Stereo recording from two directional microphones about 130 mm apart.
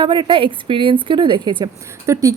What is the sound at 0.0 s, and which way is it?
A woman's voice, 35° right (ahead or behind).